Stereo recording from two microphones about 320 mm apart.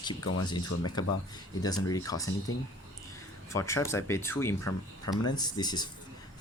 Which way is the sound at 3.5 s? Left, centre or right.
Centre.